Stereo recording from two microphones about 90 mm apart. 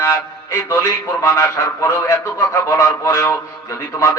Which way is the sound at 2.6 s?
30° left (ahead or behind).